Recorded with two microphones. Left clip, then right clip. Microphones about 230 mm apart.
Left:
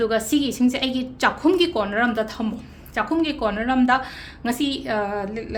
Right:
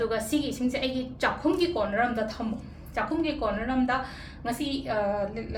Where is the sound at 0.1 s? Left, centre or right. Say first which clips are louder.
Left 7 dB; left.